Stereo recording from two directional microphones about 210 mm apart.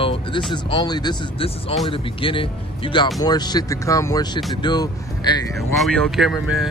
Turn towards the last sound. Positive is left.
turn(degrees=0)  # may be behind; listen again after turning